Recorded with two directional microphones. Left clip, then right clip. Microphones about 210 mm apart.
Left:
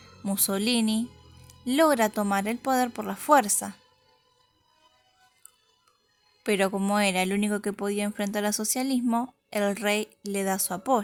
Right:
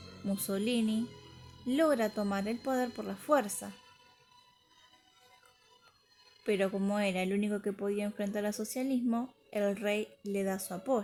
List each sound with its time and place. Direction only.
0.3 s speech: 45° left (ahead or behind)
6.4 s speech: 50° left (ahead or behind)